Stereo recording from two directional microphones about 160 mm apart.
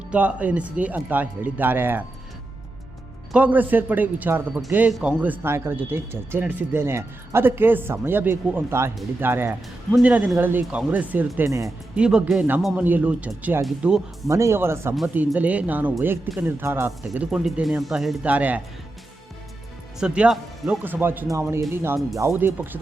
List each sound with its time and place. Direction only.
0.1 s speech: 10° right (ahead or behind)
3.3 s speech: 10° right (ahead or behind)
11.9 s speech: 5° right (ahead or behind)
14.3 s speech: 20° right (ahead or behind)
20.0 s speech: 5° right (ahead or behind)